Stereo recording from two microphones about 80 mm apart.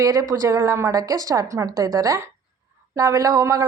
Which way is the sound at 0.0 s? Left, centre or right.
Right.